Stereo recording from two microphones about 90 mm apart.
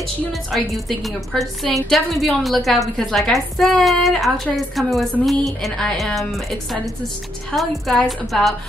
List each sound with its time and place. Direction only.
0.5 s a woman's voice: centre (ahead or behind)